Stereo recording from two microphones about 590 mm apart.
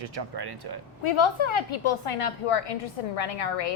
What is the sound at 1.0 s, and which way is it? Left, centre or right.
A woman's voice, left.